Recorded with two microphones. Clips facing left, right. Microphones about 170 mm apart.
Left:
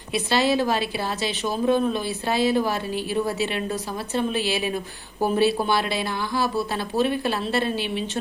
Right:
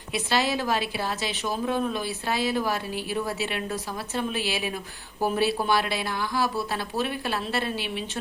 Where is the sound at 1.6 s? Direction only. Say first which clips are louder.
Left 7 dB; 30° left (ahead or behind).